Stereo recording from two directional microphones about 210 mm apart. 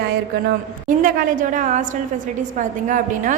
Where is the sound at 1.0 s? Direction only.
40° right (ahead or behind).